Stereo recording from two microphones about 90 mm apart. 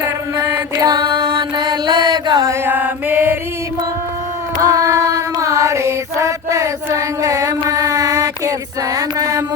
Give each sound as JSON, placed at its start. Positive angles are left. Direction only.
{"t": 0.0, "sound": "mantra", "side_deg": -35}
{"t": 0.9, "sound": "music", "side_deg": -55}
{"t": 2.5, "sound": "mantra", "side_deg": -20}
{"t": 4.5, "sound": "a sound", "side_deg": -40}
{"t": 9.0, "sound": "music", "side_deg": -40}